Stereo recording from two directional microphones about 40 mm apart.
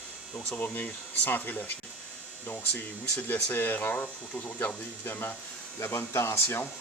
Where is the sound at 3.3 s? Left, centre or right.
Left.